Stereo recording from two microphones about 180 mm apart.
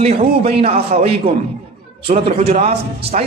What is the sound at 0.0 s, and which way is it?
A man's voice, 35° right (ahead or behind).